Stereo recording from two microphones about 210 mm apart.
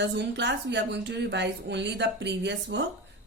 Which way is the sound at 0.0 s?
55° right (ahead or behind).